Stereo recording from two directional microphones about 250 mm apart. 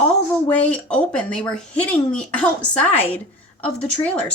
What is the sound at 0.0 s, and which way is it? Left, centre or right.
Speech, centre.